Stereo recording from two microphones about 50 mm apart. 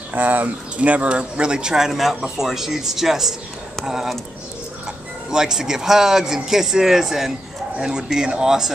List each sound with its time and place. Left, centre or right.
0.1 s speech: right; by 4.1 s centre
5.3 s speech: centre